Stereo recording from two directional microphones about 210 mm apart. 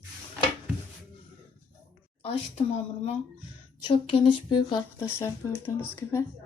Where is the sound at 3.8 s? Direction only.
25° left (ahead or behind).